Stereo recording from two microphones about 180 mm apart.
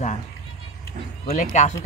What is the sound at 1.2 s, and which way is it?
Speech, 40° left (ahead or behind).